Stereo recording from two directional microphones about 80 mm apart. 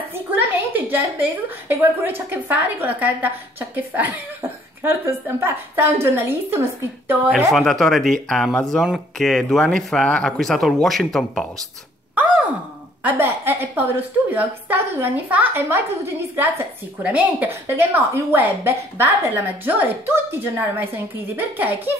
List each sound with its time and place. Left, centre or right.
0.7 s a woman's voice: right
7.5 s speech: centre
13.0 s a woman's voice: right